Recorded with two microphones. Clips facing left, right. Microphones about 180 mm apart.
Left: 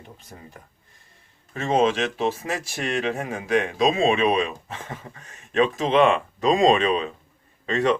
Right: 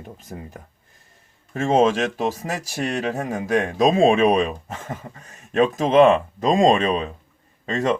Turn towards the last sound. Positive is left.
turn(degrees=-40)  # may be behind; listen again after turning